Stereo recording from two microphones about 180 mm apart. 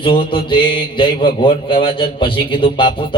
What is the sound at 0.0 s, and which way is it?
Speech, 30° left (ahead or behind).